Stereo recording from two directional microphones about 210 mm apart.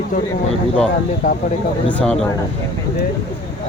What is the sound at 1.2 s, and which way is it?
Speech, 40° left (ahead or behind).